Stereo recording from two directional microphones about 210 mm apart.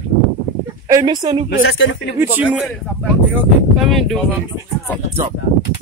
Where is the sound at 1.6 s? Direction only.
65° left (ahead or behind).